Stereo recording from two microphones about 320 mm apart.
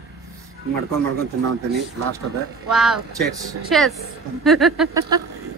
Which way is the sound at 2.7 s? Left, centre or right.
Centre.